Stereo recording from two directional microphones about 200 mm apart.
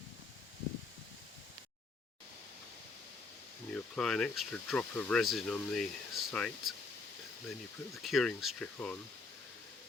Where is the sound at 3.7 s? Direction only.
Centre (ahead or behind).